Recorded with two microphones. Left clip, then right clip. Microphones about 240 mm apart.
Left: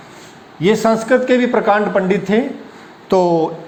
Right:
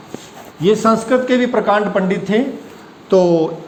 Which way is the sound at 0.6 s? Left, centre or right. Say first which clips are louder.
Even; left.